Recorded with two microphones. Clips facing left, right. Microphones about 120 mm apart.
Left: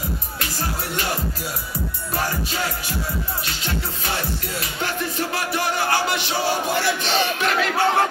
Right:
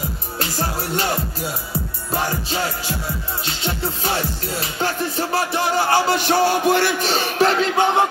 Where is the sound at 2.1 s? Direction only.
25° right (ahead or behind).